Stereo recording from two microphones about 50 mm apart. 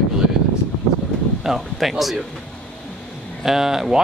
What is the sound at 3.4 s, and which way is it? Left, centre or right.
Speech, centre.